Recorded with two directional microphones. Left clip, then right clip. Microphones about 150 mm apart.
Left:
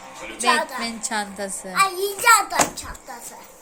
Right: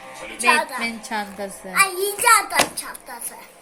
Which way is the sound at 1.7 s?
25° right (ahead or behind).